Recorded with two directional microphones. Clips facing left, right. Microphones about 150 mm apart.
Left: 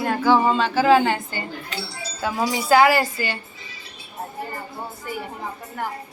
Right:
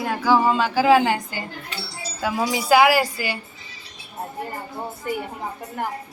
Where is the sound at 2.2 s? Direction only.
10° right (ahead or behind).